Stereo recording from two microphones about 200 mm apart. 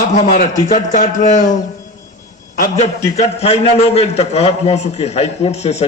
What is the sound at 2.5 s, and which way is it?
A man's voice, 40° left (ahead or behind).